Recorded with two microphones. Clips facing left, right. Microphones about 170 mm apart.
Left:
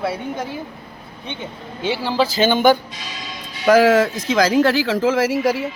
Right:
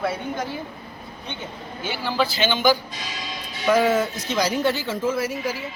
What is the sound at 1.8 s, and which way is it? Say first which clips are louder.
Speech: left 5 dB; 30° left (ahead or behind).